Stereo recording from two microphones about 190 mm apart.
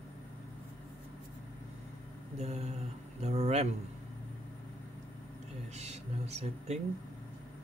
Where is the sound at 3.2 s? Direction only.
35° right (ahead or behind).